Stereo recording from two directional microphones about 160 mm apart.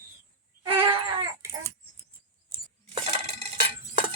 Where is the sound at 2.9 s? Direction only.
45° right (ahead or behind).